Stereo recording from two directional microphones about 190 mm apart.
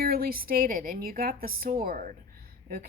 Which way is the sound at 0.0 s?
50° right (ahead or behind).